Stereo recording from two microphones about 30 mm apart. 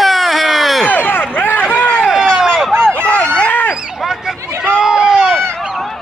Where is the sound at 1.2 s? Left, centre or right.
Left.